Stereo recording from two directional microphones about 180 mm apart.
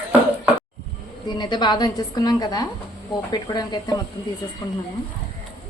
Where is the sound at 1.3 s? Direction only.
25° left (ahead or behind).